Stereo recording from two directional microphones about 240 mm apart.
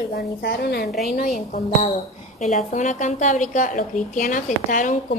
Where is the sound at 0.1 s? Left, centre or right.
Left.